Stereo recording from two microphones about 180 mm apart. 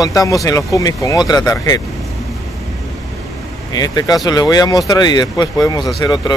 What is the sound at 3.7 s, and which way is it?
Speech, 20° left (ahead or behind).